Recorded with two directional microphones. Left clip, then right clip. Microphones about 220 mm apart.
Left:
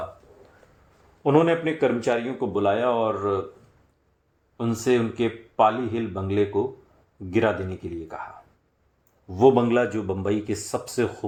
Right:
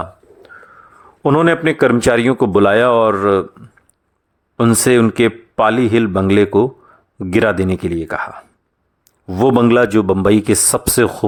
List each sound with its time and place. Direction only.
1.2 s a man's voice: 40° right (ahead or behind)
4.5 s a man's voice: 45° right (ahead or behind)